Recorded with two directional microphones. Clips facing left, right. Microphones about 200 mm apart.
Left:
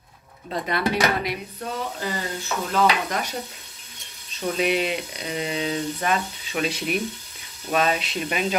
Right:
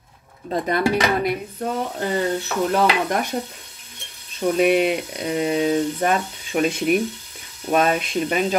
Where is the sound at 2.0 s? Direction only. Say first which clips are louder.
Right 7 dB; 60° right (ahead or behind).